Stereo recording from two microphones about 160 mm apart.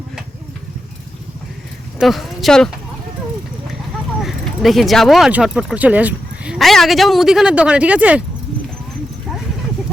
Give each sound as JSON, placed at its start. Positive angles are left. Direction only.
{"t": 2.0, "sound": "speech", "side_deg": 0}
{"t": 4.2, "sound": "speech", "side_deg": 0}